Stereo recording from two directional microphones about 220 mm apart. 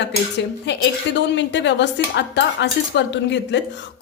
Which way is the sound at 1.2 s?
55° left (ahead or behind).